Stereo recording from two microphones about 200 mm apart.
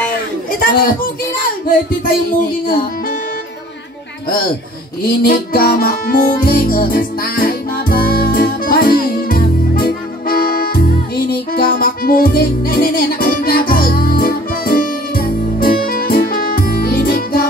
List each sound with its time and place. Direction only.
0.5 s a sound: 45° left (ahead or behind)
2.0 s music: 45° left (ahead or behind)
5.0 s music: 45° left (ahead or behind)